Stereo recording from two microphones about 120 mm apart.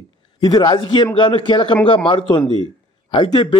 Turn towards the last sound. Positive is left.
turn(degrees=40)  # may be behind; listen again after turning